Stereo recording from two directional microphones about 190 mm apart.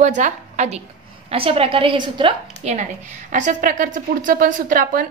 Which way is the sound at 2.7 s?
40° right (ahead or behind).